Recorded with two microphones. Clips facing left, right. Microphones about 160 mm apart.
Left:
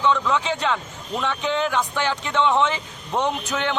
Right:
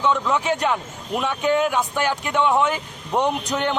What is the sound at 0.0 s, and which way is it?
A man's voice, 15° right (ahead or behind).